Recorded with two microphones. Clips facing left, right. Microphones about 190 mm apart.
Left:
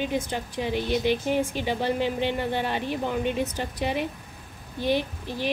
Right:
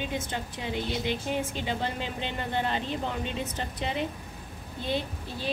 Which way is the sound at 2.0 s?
20° right (ahead or behind).